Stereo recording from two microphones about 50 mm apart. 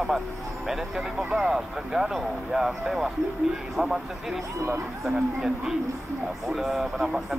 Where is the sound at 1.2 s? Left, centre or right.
Right.